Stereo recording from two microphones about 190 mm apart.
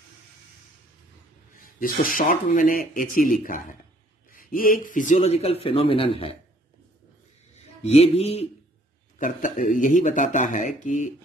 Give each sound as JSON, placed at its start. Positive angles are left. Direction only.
{"t": 1.8, "sound": "a man's voice", "side_deg": 45}
{"t": 7.5, "sound": "speech", "side_deg": 35}
{"t": 9.2, "sound": "a man's voice", "side_deg": 45}